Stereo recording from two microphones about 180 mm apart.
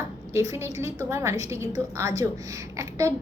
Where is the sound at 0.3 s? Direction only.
15° right (ahead or behind).